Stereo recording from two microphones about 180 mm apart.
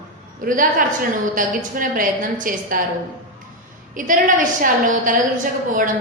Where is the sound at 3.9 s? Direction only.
50° right (ahead or behind).